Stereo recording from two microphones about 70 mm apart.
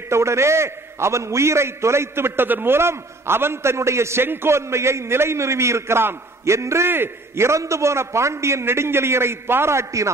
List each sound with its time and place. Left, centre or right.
0.1 s a man's voice: right